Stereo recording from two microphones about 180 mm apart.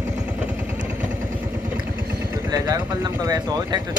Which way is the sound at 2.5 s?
20° right (ahead or behind).